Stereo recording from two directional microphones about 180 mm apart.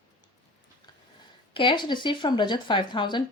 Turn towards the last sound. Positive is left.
turn(degrees=25)  # may be behind; listen again after turning